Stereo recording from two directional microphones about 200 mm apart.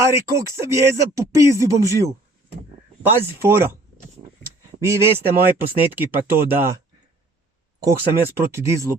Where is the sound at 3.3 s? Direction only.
10° right (ahead or behind).